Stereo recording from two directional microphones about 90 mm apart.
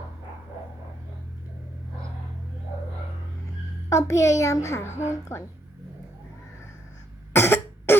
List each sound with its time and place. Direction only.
3.8 s a child's voice: 35° left (ahead or behind)
7.3 s cough: 25° left (ahead or behind)